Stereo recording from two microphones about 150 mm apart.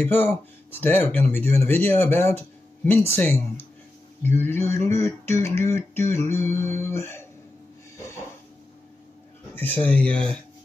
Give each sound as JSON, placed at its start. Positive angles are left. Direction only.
{"t": 0.0, "sound": "speech", "side_deg": 10}
{"t": 9.6, "sound": "speech", "side_deg": 10}